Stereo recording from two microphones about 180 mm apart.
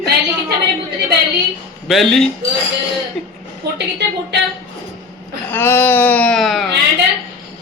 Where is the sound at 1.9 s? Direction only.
Centre (ahead or behind).